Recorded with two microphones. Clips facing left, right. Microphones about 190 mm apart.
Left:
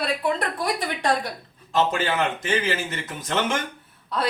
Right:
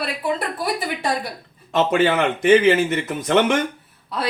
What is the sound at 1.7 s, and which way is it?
Speech, 65° right (ahead or behind).